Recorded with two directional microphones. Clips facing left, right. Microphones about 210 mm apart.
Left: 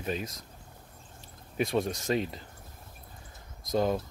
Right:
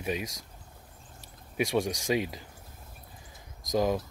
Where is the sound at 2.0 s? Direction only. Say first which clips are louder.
Right 1 dB; 10° right (ahead or behind).